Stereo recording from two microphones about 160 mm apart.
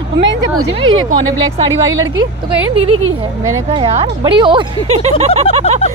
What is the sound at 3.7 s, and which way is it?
Speech, 40° right (ahead or behind).